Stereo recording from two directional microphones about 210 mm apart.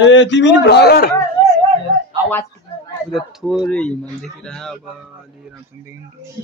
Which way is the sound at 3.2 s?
Centre (ahead or behind).